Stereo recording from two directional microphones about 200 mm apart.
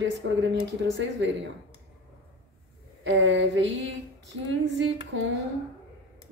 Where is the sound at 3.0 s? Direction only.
65° right (ahead or behind).